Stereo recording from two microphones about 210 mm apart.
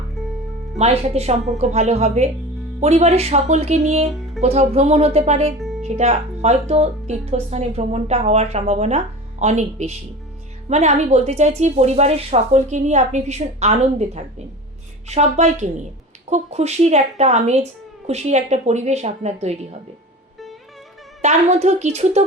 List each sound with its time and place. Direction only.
0.8 s speech: 30° right (ahead or behind)
21.2 s speech: 35° right (ahead or behind)